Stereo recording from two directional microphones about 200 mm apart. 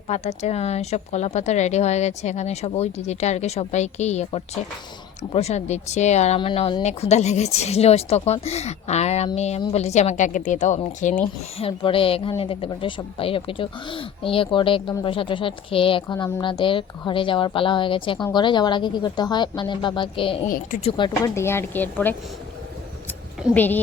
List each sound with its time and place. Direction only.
0.1 s speech: 35° left (ahead or behind)
11.5 s speech: 25° left (ahead or behind); by 22.1 s 10° left (ahead or behind)
23.6 s speech: 10° left (ahead or behind)